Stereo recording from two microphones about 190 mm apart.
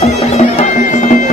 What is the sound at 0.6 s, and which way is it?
Bagpipes, 40° left (ahead or behind).